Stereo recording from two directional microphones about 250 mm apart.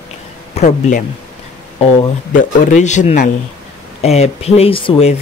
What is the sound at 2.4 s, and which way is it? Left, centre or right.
Speech, left.